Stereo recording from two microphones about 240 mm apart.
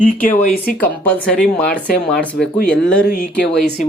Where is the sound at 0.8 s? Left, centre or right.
Centre.